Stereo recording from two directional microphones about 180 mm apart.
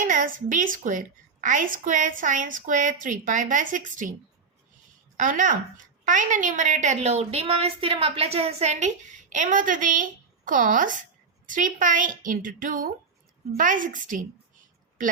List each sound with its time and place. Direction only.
0.0 s a woman's voice: 50° right (ahead or behind)
5.1 s a woman's voice: 45° right (ahead or behind)